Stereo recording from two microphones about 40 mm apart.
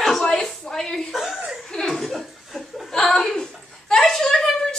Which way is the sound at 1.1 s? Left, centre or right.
Centre.